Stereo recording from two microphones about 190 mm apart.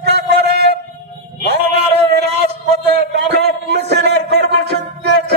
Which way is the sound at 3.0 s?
60° right (ahead or behind).